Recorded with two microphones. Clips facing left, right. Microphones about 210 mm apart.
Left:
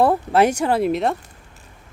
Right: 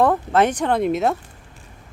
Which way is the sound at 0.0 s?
10° left (ahead or behind).